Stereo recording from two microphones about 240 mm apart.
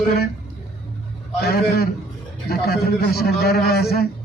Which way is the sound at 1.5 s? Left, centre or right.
Left.